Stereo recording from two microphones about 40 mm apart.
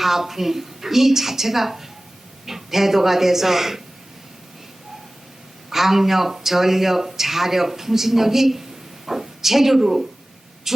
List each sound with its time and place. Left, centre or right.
0.0 s speech: centre
5.7 s speech: centre